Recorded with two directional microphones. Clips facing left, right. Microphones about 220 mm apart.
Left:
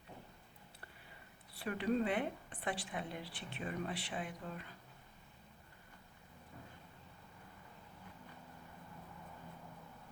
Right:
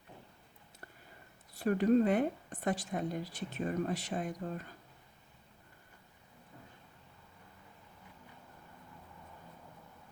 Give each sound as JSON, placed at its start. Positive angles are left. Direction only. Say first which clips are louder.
{"t": 1.5, "sound": "a woman's voice", "louder": "right 8 dB", "side_deg": -45}